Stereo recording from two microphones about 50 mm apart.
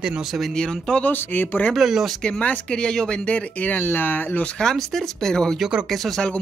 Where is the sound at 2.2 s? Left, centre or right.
Centre.